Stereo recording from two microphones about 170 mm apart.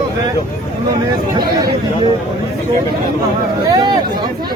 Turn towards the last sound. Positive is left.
turn(degrees=-20)  # may be behind; listen again after turning